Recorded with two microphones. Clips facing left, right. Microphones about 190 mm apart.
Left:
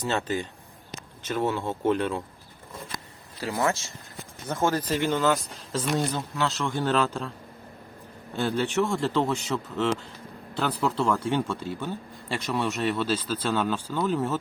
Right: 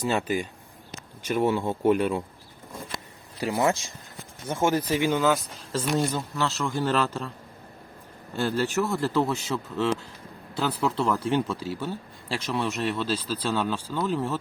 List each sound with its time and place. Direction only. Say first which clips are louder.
0.0 s speech: right 2 dB; 10° right (ahead or behind)
3.4 s speech: right 2 dB; 15° right (ahead or behind)
8.4 s speech: even; 5° right (ahead or behind)